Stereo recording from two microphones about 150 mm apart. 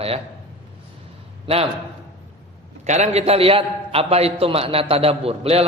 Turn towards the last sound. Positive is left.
turn(degrees=-40)  # may be behind; listen again after turning